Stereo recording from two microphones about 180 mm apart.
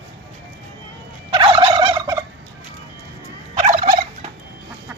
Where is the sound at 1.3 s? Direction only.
25° right (ahead or behind).